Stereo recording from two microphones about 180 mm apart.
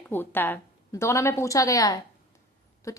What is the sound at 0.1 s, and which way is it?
A woman's voice, 10° left (ahead or behind).